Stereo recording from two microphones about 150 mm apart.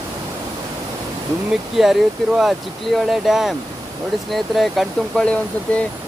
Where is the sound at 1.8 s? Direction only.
5° right (ahead or behind).